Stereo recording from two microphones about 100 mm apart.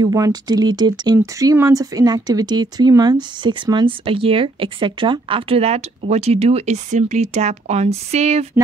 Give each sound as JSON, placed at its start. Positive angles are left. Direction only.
{"t": 0.0, "sound": "speech", "side_deg": -40}